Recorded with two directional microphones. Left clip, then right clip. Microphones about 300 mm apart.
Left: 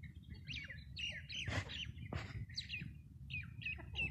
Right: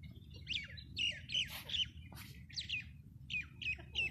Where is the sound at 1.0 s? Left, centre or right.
Centre.